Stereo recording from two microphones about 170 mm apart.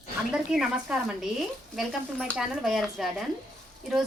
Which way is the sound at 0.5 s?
5° right (ahead or behind).